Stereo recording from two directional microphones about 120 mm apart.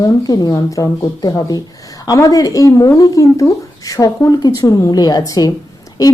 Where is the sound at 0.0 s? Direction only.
35° left (ahead or behind).